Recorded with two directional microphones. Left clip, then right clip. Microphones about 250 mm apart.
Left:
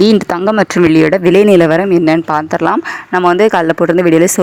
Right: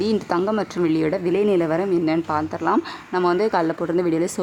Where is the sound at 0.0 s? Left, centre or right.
Left.